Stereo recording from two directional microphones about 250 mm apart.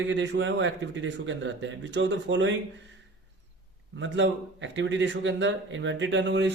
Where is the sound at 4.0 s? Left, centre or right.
Right.